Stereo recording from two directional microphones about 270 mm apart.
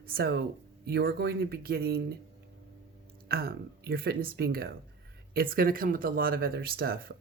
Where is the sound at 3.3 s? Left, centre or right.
Right.